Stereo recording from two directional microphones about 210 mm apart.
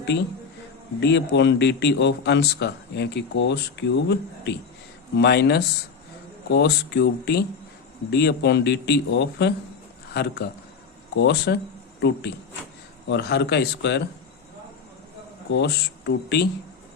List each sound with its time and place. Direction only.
0.9 s a man's voice: 55° left (ahead or behind)
15.5 s a man's voice: 55° left (ahead or behind)